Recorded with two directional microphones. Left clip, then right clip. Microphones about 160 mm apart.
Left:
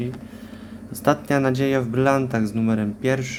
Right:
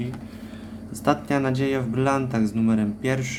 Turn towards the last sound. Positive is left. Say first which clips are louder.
# left 3 dB
turn(degrees=20)  # may be behind; listen again after turning